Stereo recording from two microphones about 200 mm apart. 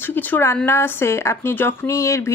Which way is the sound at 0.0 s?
10° left (ahead or behind).